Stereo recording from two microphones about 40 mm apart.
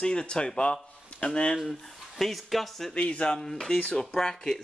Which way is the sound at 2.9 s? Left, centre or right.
Left.